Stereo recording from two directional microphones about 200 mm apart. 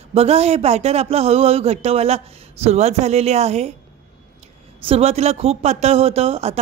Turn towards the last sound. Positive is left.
turn(degrees=-30)  # may be behind; listen again after turning